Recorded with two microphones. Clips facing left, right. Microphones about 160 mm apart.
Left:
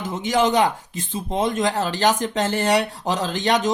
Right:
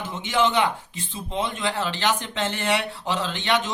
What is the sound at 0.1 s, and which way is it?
Speech, 40° left (ahead or behind).